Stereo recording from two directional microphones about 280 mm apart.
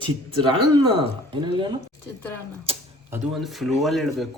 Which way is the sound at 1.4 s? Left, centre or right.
Centre.